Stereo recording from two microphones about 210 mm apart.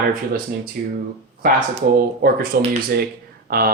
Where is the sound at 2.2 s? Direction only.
45° right (ahead or behind).